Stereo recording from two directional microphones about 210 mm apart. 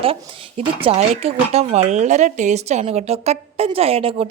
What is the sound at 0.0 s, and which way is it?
Speech, 25° right (ahead or behind).